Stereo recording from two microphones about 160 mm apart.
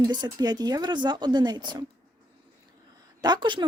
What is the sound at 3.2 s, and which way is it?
Speech, 25° right (ahead or behind).